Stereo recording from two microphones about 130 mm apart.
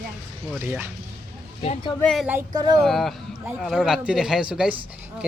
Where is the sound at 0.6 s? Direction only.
15° right (ahead or behind).